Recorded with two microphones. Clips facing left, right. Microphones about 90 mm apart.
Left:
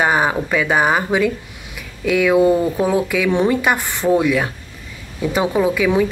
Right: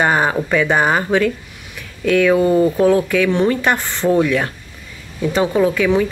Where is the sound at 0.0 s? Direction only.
5° left (ahead or behind).